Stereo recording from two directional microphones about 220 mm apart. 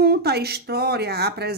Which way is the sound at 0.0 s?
45° right (ahead or behind).